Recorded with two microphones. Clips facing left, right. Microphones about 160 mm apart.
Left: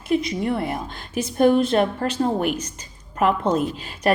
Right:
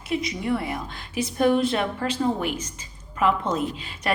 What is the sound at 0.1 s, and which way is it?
Speech, 35° left (ahead or behind).